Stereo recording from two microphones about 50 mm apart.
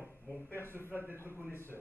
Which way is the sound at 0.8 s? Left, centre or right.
Left.